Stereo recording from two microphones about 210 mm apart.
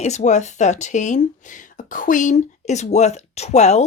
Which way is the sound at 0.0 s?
35° left (ahead or behind).